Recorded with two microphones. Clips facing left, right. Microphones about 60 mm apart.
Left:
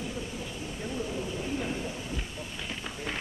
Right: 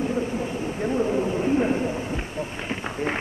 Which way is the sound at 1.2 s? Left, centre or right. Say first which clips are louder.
Right 11 dB; right.